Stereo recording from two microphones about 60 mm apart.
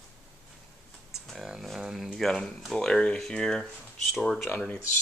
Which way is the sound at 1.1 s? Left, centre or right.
Centre.